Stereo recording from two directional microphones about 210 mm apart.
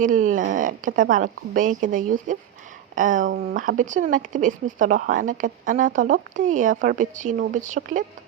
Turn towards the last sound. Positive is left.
turn(degrees=-35)  # may be behind; listen again after turning